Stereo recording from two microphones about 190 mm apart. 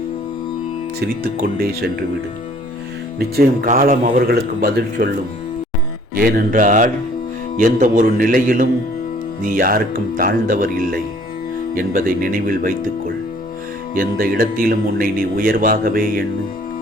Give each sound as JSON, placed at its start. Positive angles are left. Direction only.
{"t": 0.9, "sound": "speech", "side_deg": -50}
{"t": 3.2, "sound": "speech", "side_deg": -50}
{"t": 6.1, "sound": "speech", "side_deg": -50}